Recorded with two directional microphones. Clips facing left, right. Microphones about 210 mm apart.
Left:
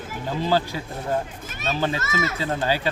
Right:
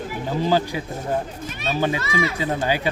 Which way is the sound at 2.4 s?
15° right (ahead or behind).